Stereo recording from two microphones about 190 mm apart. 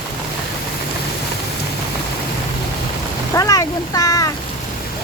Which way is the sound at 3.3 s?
20° left (ahead or behind).